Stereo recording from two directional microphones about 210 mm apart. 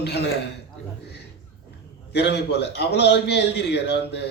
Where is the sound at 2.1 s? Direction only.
50° left (ahead or behind).